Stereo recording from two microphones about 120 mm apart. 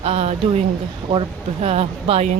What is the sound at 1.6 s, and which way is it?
Speech, 60° right (ahead or behind).